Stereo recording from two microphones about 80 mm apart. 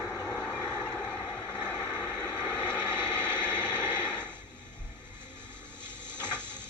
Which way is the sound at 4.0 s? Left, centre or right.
Centre.